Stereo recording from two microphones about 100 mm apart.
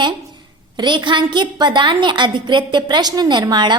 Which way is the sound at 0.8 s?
50° right (ahead or behind).